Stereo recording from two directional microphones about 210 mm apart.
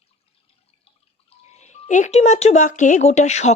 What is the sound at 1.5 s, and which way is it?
Speech, 35° left (ahead or behind).